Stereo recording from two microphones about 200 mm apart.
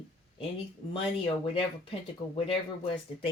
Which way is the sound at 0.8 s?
30° left (ahead or behind).